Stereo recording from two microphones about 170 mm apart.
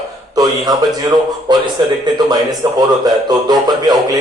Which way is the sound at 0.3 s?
20° right (ahead or behind).